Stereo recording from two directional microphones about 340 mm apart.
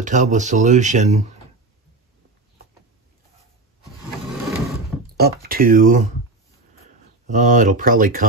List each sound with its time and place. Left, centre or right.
0.0 s speech: right
5.1 s speech: right
7.2 s speech: right